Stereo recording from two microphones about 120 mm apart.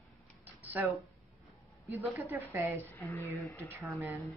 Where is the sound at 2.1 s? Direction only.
25° right (ahead or behind).